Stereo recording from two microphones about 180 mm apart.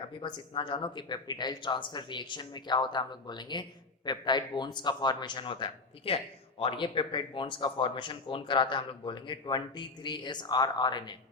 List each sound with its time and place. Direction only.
0.2 s speech: 25° left (ahead or behind)